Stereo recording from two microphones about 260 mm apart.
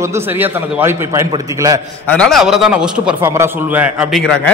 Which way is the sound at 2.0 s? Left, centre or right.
Centre.